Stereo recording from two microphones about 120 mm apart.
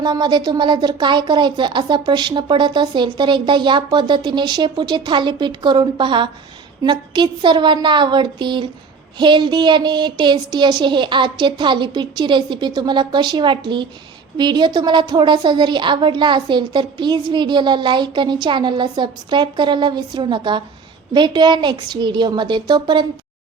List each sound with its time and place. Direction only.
0.0 s a woman's voice: 40° right (ahead or behind)